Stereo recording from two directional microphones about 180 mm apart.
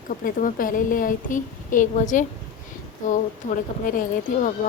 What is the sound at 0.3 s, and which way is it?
A woman's voice, 50° left (ahead or behind).